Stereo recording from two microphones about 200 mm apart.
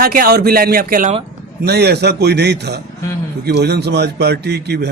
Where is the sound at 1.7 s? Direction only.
55° right (ahead or behind).